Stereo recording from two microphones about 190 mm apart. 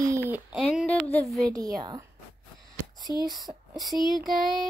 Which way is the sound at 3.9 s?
Centre (ahead or behind).